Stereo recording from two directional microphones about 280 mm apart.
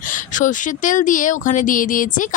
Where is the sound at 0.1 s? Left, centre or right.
Left.